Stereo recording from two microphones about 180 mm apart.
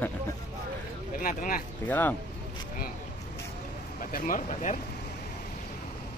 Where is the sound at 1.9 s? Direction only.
10° left (ahead or behind).